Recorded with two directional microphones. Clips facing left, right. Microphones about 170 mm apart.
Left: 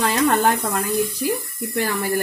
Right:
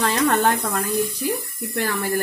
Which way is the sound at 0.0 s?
10° left (ahead or behind).